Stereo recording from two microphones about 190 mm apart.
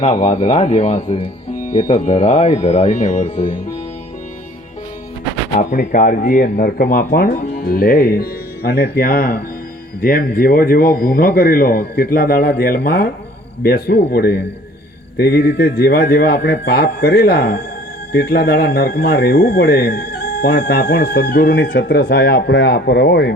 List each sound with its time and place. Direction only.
0.0 s speech: 35° left (ahead or behind)
5.5 s speech: 40° left (ahead or behind); by 23.3 s 60° left (ahead or behind)